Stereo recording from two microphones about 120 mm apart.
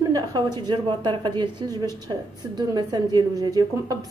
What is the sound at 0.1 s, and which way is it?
A woman's voice, 35° right (ahead or behind).